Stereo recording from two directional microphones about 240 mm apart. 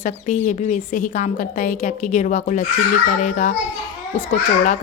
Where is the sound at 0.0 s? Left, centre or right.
Left.